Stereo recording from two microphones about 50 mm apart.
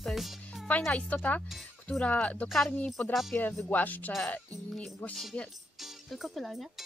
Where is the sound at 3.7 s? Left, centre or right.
Left.